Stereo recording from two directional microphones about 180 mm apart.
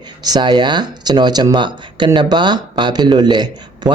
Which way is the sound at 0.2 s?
25° right (ahead or behind).